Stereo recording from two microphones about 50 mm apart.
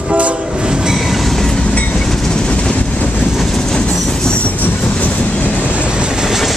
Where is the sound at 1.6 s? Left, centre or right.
Left.